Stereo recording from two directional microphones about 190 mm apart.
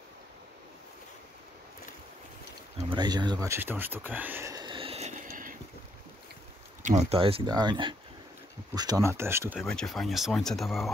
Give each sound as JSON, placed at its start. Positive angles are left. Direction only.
{"t": 2.9, "sound": "speech", "side_deg": -25}
{"t": 6.8, "sound": "speech", "side_deg": -40}
{"t": 9.6, "sound": "speech", "side_deg": 0}